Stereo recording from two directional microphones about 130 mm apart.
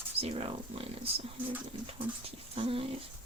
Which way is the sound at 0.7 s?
45° right (ahead or behind).